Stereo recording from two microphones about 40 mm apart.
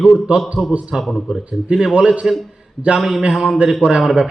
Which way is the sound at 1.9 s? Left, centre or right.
Right.